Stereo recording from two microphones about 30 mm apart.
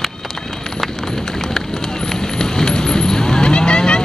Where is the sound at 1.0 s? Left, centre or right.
Centre; by 4.0 s left.